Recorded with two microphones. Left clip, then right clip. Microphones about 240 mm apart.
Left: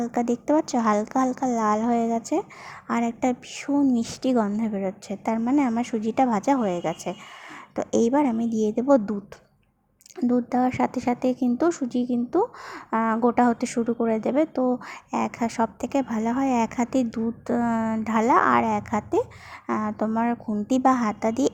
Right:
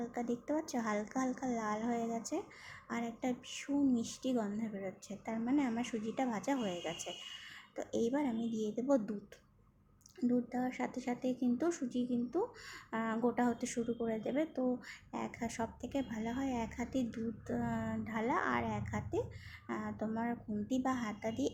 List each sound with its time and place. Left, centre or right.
0.0 s a woman's voice: left
10.2 s a woman's voice: left